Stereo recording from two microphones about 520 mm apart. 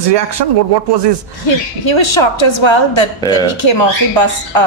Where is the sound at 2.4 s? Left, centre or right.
Left.